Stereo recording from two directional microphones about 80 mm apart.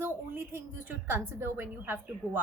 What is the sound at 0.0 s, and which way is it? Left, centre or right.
A woman's voice, right.